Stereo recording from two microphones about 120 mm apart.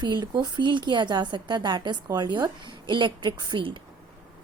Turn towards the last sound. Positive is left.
turn(degrees=-40)  # may be behind; listen again after turning